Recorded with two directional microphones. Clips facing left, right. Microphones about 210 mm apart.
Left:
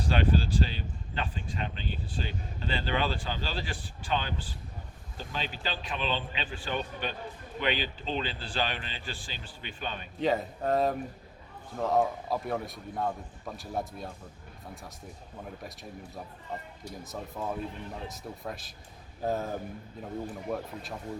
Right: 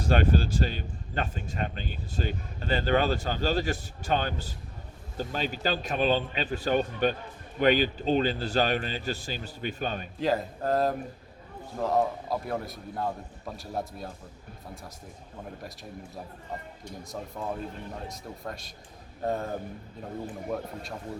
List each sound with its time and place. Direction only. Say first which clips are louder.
0.0 s a man's voice: right 3 dB; 45° right (ahead or behind)
10.2 s a man's voice: even; centre (ahead or behind)
15.6 s a man's voice: right 1 dB; centre (ahead or behind)